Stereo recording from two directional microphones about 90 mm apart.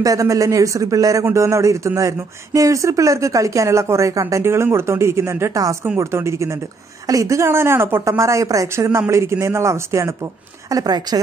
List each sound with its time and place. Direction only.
0.0 s speech: 40° right (ahead or behind)
10.7 s speech: 45° right (ahead or behind)